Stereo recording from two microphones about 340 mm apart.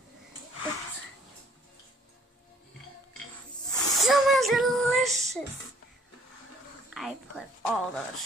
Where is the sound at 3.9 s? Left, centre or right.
Centre.